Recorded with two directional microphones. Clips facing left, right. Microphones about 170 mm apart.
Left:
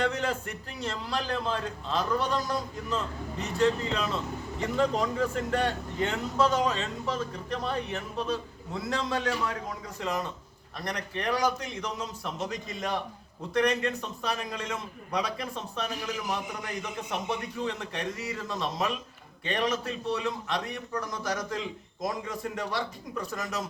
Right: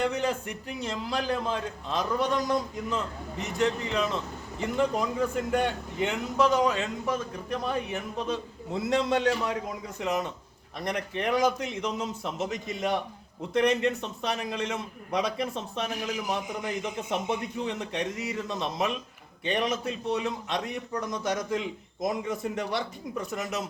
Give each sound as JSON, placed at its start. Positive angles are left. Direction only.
{"t": 0.0, "sound": "speech", "side_deg": -10}
{"t": 4.8, "sound": "a man's voice", "side_deg": -10}